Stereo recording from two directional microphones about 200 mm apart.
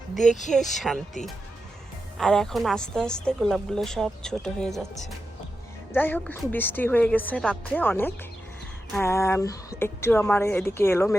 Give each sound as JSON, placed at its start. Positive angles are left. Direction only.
{"t": 0.3, "sound": "speech", "side_deg": 35}
{"t": 0.5, "sound": "a woman's voice", "side_deg": 0}
{"t": 2.1, "sound": "a woman's voice", "side_deg": 5}
{"t": 5.9, "sound": "a woman's voice", "side_deg": 10}